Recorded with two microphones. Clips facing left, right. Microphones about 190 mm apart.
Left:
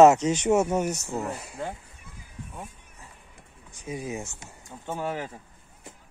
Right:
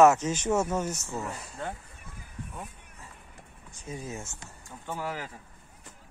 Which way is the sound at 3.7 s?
15° left (ahead or behind).